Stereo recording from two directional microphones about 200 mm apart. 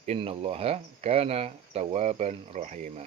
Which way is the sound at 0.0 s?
30° right (ahead or behind).